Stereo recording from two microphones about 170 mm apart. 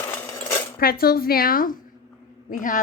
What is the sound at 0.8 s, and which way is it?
A woman's voice, 60° left (ahead or behind).